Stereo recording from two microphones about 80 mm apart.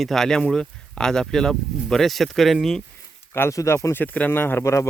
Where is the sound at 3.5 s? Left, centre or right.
Left.